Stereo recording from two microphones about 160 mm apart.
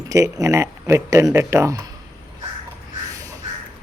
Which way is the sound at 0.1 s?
20° right (ahead or behind).